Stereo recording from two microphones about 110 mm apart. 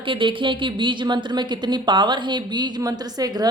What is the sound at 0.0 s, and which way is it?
A woman's voice, 50° right (ahead or behind).